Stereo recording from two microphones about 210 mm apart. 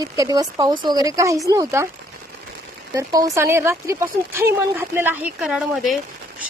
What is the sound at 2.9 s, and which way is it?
Speech, 15° right (ahead or behind).